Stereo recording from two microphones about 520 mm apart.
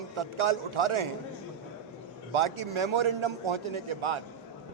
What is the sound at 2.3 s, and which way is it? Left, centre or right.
A man's voice, right.